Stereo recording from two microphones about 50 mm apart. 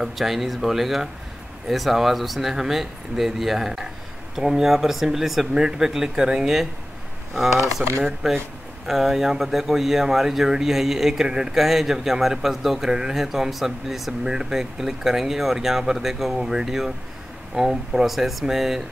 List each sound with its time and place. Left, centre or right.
0.0 s speech: centre
8.2 s speech: centre